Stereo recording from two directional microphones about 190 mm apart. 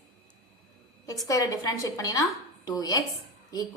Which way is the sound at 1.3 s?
20° left (ahead or behind).